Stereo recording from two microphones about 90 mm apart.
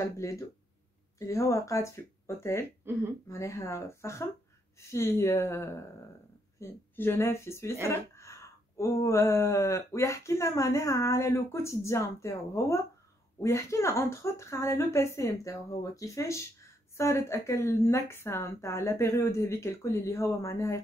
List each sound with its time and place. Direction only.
0.0 s speech: 35° left (ahead or behind)
2.9 s speech: 30° right (ahead or behind)
3.3 s speech: 35° left (ahead or behind)